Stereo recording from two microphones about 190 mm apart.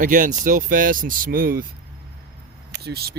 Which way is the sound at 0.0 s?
45° right (ahead or behind).